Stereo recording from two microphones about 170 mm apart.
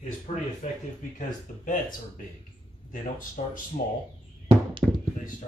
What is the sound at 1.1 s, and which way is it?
Speech, 50° left (ahead or behind).